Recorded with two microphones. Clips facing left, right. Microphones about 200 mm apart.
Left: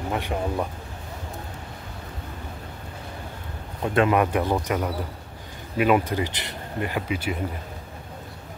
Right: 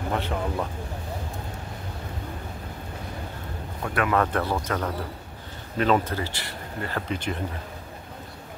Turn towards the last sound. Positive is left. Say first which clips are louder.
# left 2 dB
turn(degrees=10)  # may be behind; listen again after turning